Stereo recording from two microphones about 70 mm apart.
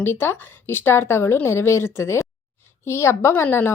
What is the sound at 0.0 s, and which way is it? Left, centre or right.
A woman's voice, left.